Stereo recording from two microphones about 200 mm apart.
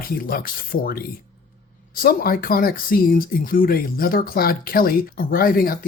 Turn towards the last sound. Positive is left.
turn(degrees=45)  # may be behind; listen again after turning